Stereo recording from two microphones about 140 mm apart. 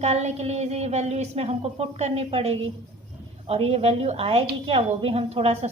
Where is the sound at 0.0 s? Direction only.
50° right (ahead or behind).